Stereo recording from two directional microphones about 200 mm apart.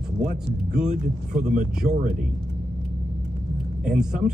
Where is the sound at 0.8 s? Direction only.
5° right (ahead or behind).